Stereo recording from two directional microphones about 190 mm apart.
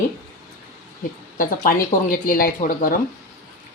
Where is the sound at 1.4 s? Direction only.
50° left (ahead or behind).